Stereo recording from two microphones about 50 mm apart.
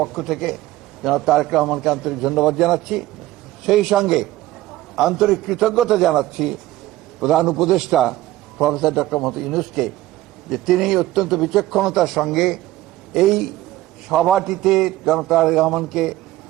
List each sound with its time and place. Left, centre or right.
0.0 s a man's voice: centre